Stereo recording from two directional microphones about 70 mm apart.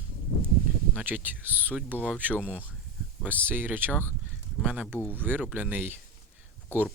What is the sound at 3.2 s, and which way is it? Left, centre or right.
Speech, right.